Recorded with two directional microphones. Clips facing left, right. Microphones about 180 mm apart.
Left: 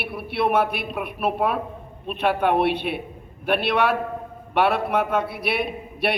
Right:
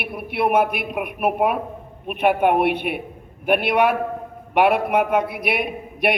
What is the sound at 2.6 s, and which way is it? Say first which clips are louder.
Speech: right 2 dB; 50° right (ahead or behind).